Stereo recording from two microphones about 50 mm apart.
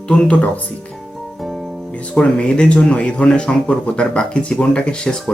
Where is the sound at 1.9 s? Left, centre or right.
Left.